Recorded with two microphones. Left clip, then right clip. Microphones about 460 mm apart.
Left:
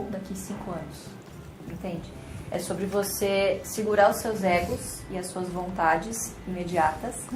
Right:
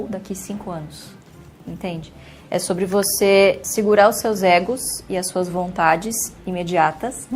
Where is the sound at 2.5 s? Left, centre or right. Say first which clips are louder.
Right 9 dB; right.